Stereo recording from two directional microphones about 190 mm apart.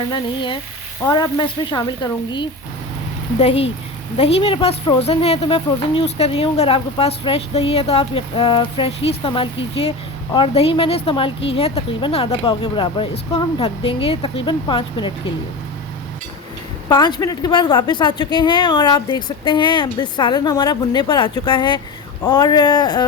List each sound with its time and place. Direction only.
0.1 s speech: 25° left (ahead or behind)
16.9 s speech: 20° left (ahead or behind)